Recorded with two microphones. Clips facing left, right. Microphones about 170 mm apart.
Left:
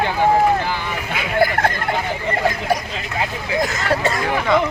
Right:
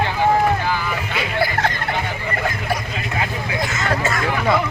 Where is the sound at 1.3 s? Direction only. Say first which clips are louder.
Left 4 dB; 50° left (ahead or behind).